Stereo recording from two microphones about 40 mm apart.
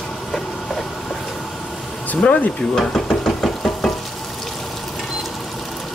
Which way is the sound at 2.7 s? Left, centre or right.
Centre.